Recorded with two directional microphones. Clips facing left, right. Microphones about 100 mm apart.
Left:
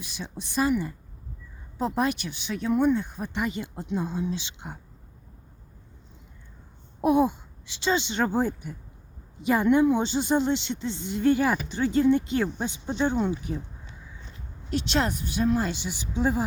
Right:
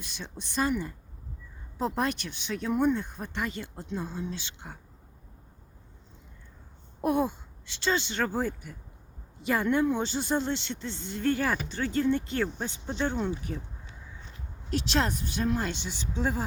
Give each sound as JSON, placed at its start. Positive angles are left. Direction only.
{"t": 0.0, "sound": "a woman's voice", "side_deg": 5}
{"t": 7.0, "sound": "a woman's voice", "side_deg": 15}
{"t": 14.7, "sound": "speech", "side_deg": 0}